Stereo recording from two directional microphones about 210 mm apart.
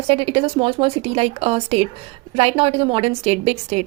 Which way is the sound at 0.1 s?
25° right (ahead or behind).